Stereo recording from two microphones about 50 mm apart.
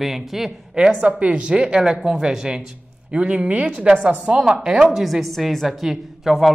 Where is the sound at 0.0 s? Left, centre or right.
Centre.